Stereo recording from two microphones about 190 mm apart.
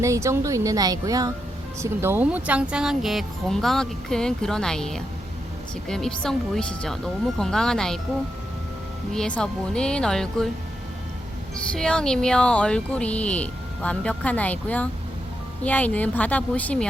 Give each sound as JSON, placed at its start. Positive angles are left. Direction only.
{"t": 0.0, "sound": "speech", "side_deg": -15}
{"t": 9.1, "sound": "speech", "side_deg": 5}
{"t": 11.7, "sound": "speech", "side_deg": 5}